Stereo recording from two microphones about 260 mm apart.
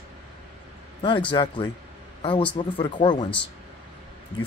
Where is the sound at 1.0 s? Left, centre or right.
Centre.